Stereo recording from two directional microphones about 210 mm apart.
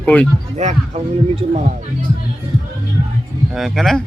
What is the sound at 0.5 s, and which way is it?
Speech, 35° right (ahead or behind).